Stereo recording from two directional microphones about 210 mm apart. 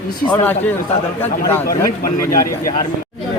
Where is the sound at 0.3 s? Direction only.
10° left (ahead or behind).